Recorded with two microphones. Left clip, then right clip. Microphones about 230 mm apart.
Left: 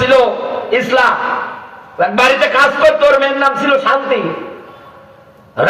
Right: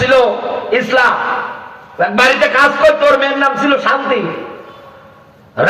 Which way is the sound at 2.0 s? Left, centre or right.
Left.